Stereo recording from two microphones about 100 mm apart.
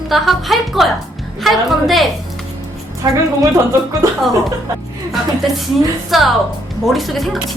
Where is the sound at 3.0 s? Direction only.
35° right (ahead or behind).